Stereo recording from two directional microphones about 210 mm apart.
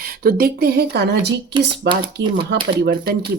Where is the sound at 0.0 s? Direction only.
45° right (ahead or behind).